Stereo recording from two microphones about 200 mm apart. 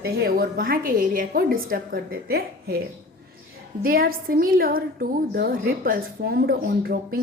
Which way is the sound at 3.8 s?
45° right (ahead or behind).